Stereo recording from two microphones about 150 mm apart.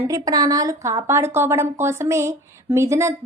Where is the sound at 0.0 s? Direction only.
25° right (ahead or behind).